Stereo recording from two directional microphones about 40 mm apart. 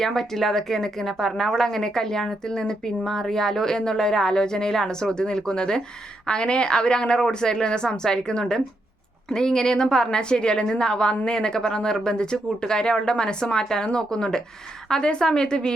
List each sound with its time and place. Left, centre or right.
0.0 s a woman's voice: centre